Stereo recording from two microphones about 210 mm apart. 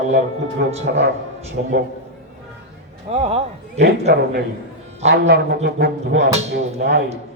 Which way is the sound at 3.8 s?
50° right (ahead or behind).